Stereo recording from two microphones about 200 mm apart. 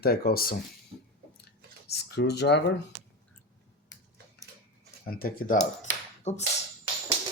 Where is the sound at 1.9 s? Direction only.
55° left (ahead or behind).